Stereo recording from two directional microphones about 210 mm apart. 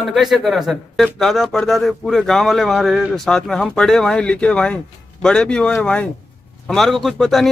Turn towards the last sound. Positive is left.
turn(degrees=0)  # may be behind; listen again after turning